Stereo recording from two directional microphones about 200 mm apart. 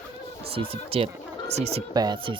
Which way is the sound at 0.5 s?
30° right (ahead or behind).